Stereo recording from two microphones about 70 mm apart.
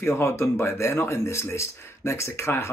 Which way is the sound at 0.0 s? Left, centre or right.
Left.